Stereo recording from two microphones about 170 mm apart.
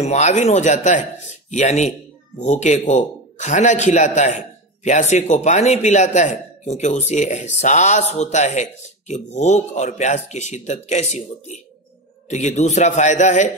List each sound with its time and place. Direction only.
0.0 s a man's voice: 40° left (ahead or behind)